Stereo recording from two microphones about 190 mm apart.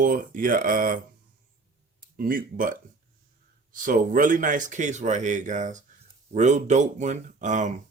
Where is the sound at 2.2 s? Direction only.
50° right (ahead or behind).